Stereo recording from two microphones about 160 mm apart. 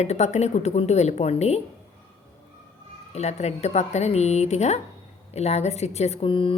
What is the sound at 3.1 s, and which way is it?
A woman's voice, 45° left (ahead or behind).